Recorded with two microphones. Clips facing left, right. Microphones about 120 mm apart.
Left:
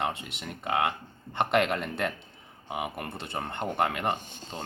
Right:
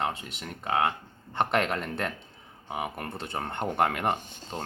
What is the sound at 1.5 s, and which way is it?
Speech, 5° left (ahead or behind).